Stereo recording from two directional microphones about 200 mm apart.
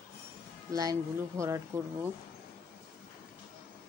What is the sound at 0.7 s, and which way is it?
Speech, 15° right (ahead or behind).